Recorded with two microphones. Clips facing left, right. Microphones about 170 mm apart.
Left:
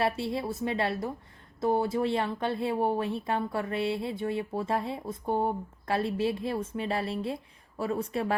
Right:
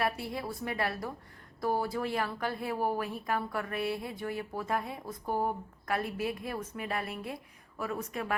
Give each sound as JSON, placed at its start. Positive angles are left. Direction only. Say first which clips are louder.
{"t": 0.0, "sound": "speech", "louder": "left 4 dB", "side_deg": 25}